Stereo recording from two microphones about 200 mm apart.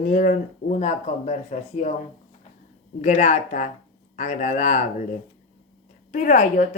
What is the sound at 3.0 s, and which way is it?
Speech, 35° left (ahead or behind).